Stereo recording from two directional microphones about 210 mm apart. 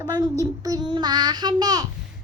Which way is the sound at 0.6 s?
20° right (ahead or behind).